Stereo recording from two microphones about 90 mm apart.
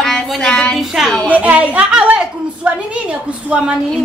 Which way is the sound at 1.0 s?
5° right (ahead or behind).